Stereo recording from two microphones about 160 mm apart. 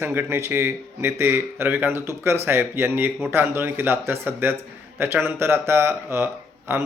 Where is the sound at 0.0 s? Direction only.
15° right (ahead or behind).